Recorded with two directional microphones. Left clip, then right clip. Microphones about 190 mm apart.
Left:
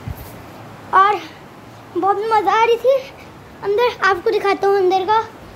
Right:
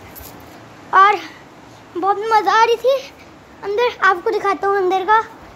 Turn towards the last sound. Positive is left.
turn(degrees=0)  # may be behind; listen again after turning